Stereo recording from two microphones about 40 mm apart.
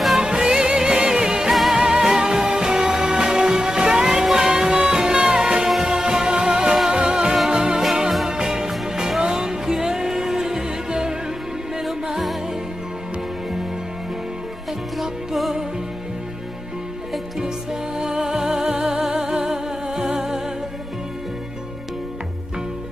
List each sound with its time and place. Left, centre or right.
0.2 s music: centre
1.5 s music: centre
1.8 s music: centre
11.8 s music: centre
15.0 s music: centre
17.9 s music: centre